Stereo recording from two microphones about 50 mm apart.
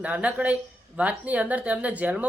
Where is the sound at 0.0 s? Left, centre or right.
Right.